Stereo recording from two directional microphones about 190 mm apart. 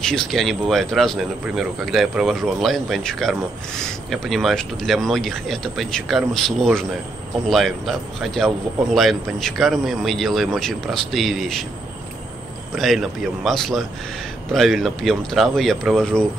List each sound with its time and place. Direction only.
0.0 s speech: centre (ahead or behind)
12.7 s speech: centre (ahead or behind)